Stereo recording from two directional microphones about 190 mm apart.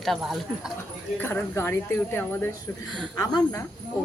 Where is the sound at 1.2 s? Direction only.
10° left (ahead or behind).